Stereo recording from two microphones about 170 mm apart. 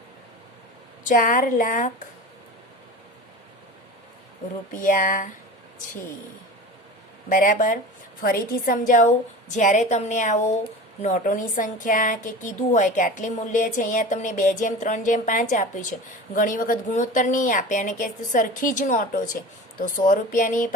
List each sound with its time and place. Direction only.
1.0 s speech: 55° left (ahead or behind)
4.7 s speech: 50° left (ahead or behind)
7.3 s a woman's voice: 50° left (ahead or behind)